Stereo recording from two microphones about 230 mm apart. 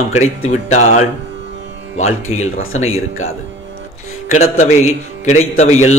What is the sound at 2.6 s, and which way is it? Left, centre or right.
Speech, left.